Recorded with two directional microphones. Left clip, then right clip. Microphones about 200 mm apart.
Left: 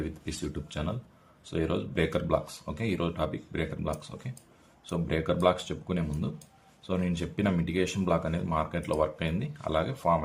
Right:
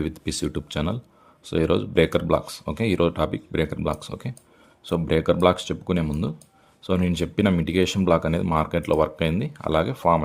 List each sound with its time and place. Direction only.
0.0 s speech: 50° right (ahead or behind)